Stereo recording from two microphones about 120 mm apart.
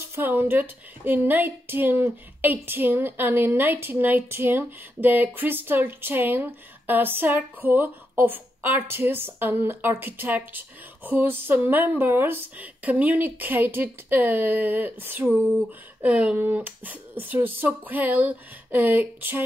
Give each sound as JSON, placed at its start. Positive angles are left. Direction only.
{"t": 0.1, "sound": "speech", "side_deg": -15}